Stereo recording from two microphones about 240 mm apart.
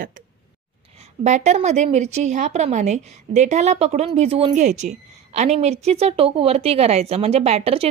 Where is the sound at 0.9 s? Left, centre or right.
Right.